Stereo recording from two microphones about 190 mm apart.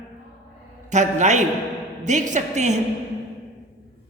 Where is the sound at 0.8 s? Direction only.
40° right (ahead or behind).